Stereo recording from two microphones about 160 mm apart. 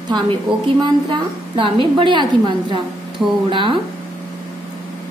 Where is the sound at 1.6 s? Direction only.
30° right (ahead or behind).